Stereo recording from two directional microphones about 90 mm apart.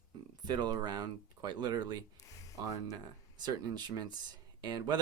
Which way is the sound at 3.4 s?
50° right (ahead or behind).